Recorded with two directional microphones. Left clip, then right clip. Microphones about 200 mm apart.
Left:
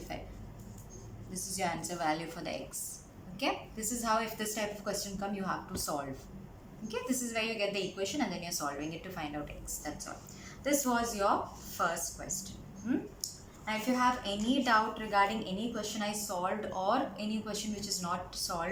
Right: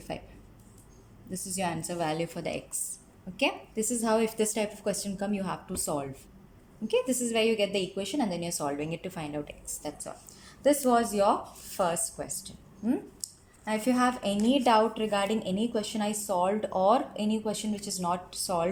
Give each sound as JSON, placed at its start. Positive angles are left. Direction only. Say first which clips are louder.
{"t": 1.3, "sound": "a woman's voice", "louder": "right 3 dB", "side_deg": -45}